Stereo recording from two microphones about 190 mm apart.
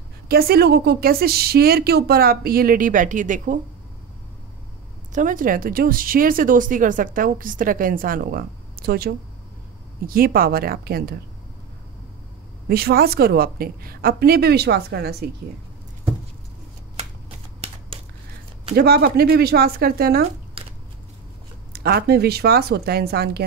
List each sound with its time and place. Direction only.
0.3 s speech: 55° right (ahead or behind)
5.1 s speech: 45° right (ahead or behind)
12.6 s a woman's voice: 55° right (ahead or behind)
18.8 s a woman's voice: 55° right (ahead or behind)
21.7 s a woman's voice: 55° right (ahead or behind)